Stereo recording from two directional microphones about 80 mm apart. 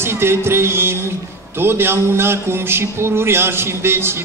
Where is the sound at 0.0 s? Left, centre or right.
Right.